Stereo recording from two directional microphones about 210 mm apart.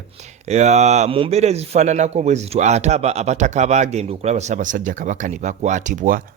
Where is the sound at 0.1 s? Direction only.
30° right (ahead or behind).